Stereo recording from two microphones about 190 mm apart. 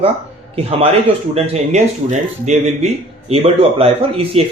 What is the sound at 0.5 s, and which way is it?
A man's voice, 30° right (ahead or behind).